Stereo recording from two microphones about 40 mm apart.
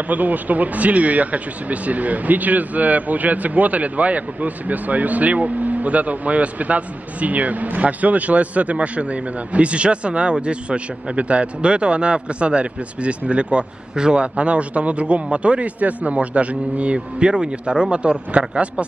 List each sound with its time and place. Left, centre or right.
0.1 s speech: right